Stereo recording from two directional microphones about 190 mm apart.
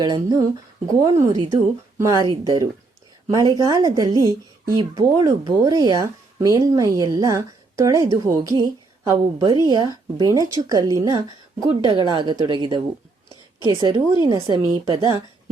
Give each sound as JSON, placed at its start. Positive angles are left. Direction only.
{"t": 0.0, "sound": "speech", "side_deg": -20}